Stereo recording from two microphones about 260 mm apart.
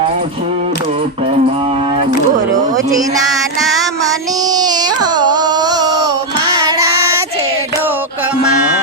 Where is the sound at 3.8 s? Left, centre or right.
Centre.